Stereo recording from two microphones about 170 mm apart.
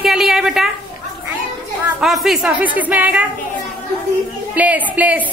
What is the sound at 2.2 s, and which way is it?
A woman's voice, centre (ahead or behind).